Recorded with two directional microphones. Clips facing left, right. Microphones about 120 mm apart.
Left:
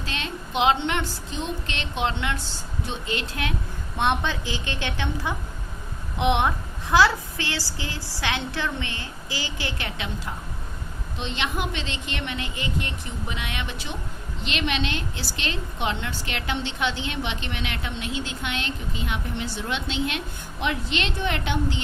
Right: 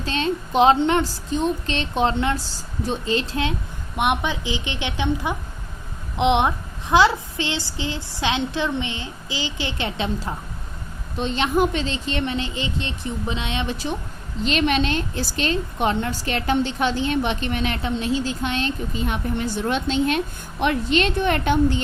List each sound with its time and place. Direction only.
0.0 s speech: 35° right (ahead or behind)
3.9 s a woman's voice: 15° right (ahead or behind)
11.2 s speech: 40° right (ahead or behind)
14.4 s a woman's voice: 40° right (ahead or behind)